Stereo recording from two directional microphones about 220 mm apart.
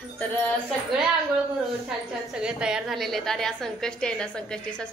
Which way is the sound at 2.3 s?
5° right (ahead or behind).